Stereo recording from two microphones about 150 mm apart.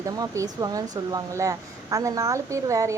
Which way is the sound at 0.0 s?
25° right (ahead or behind).